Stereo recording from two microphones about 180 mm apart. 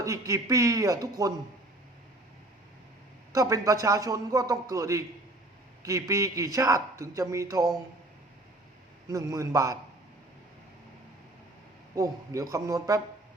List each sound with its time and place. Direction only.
0.0 s a man's voice: 15° right (ahead or behind)
3.3 s a man's voice: 20° right (ahead or behind)
9.0 s a man's voice: 20° right (ahead or behind)
11.9 s a man's voice: 20° right (ahead or behind)